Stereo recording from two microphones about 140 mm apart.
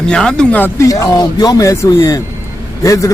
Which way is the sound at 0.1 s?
5° left (ahead or behind).